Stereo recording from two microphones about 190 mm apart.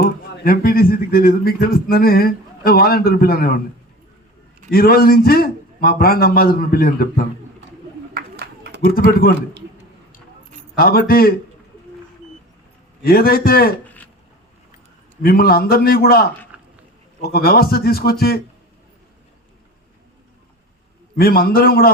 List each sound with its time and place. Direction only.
0.0 s speech: 50° left (ahead or behind)
4.7 s speech: 50° left (ahead or behind)
8.1 s a sound: 55° right (ahead or behind)
10.8 s speech: 50° left (ahead or behind)
13.0 s speech: 50° left (ahead or behind)
13.8 s a sound: 10° left (ahead or behind)
15.2 s speech: 55° left (ahead or behind)
16.5 s a sound: 5° right (ahead or behind)
17.3 s speech: 55° left (ahead or behind)
21.2 s speech: 50° left (ahead or behind)